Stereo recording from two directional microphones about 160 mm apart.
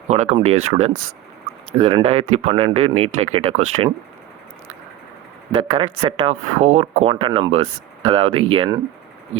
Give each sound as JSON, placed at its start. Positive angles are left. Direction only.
{"t": 0.1, "sound": "speech", "side_deg": -45}
{"t": 5.5, "sound": "speech", "side_deg": -35}